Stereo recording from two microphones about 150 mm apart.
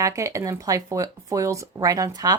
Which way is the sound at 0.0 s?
20° right (ahead or behind).